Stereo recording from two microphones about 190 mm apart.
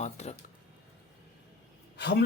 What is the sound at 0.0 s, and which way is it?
Speech, 35° left (ahead or behind).